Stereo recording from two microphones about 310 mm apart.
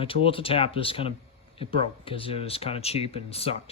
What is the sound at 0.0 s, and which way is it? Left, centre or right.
Speech, centre.